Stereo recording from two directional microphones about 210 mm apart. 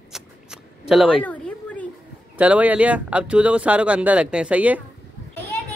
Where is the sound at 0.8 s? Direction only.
Centre (ahead or behind).